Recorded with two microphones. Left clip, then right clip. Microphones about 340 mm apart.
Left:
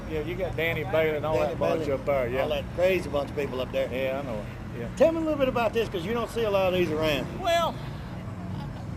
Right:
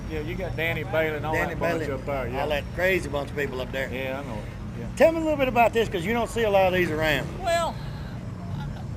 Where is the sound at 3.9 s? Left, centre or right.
Centre.